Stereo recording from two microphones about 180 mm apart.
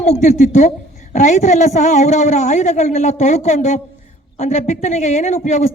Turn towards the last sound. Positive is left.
turn(degrees=40)  # may be behind; listen again after turning